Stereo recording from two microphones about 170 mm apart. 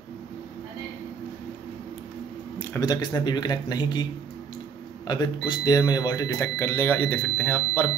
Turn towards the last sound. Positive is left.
turn(degrees=10)  # may be behind; listen again after turning